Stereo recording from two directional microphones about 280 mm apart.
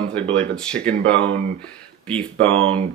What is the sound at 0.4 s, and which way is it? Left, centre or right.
Speech, centre.